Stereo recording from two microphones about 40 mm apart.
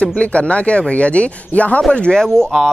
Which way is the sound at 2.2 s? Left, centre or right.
Centre.